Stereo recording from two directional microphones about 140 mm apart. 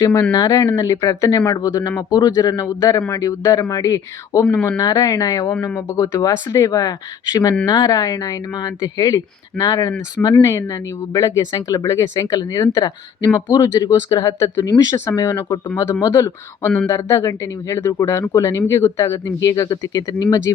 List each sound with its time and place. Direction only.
0.0 s speech: 25° left (ahead or behind)